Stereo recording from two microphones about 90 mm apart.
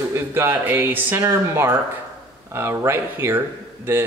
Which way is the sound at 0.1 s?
25° right (ahead or behind).